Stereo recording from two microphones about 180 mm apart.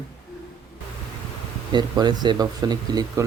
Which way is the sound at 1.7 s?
25° right (ahead or behind).